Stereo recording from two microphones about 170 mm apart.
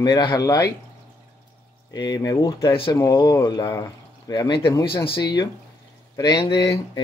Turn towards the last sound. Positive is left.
turn(degrees=20)  # may be behind; listen again after turning